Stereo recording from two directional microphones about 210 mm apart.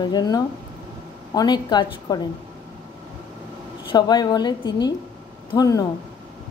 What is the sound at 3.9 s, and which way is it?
A woman's voice, 20° left (ahead or behind).